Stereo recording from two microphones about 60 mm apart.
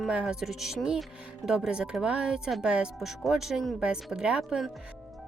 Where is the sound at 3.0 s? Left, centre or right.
Centre.